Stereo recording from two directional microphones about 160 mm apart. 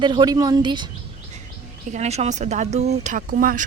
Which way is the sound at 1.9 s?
45° right (ahead or behind).